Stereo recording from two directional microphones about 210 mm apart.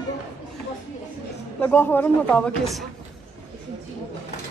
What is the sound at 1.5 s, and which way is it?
A man's voice, 10° left (ahead or behind).